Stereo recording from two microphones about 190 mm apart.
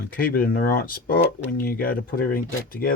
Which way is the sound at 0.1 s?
50° left (ahead or behind).